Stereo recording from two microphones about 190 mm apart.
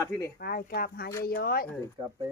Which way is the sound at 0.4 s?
50° left (ahead or behind).